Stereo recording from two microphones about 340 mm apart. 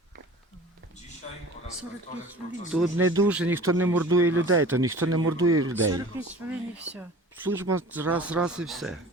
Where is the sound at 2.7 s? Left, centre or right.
Centre.